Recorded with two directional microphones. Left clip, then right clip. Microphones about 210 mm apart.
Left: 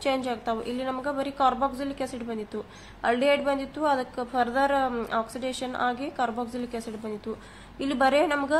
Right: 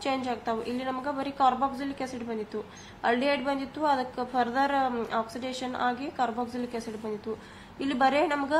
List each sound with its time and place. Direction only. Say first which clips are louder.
0.0 s a woman's voice: left 3 dB; 20° left (ahead or behind)